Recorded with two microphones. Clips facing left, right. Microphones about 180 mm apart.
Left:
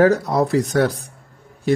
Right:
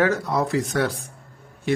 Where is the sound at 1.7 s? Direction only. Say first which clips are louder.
Left 4 dB; 35° left (ahead or behind).